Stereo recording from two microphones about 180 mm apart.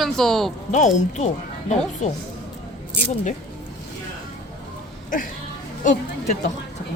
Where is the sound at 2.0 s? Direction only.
40° left (ahead or behind).